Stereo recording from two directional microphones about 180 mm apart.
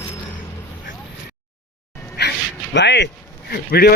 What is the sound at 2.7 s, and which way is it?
Speech, 75° left (ahead or behind).